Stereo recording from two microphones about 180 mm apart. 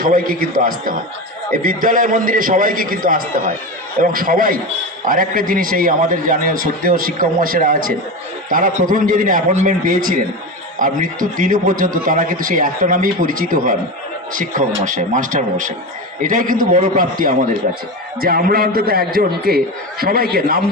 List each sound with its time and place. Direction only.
0.0 s a man's voice: 50° right (ahead or behind)